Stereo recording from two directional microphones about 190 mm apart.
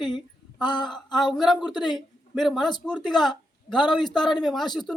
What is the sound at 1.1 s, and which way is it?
A man's voice, centre (ahead or behind).